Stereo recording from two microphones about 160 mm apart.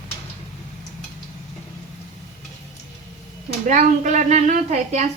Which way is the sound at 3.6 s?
50° right (ahead or behind).